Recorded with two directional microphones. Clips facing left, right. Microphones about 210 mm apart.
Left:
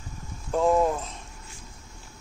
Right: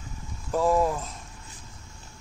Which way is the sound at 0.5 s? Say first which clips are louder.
Left 1 dB; centre (ahead or behind).